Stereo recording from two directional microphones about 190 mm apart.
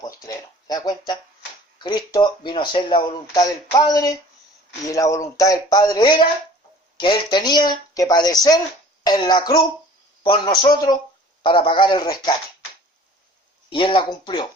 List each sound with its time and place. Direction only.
0.0 s speech: 20° left (ahead or behind)
13.7 s speech: 25° left (ahead or behind)